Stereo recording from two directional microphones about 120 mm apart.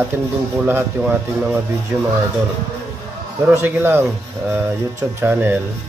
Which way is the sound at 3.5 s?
20° right (ahead or behind).